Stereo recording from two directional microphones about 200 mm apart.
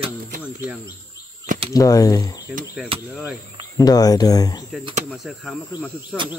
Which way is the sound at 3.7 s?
20° left (ahead or behind).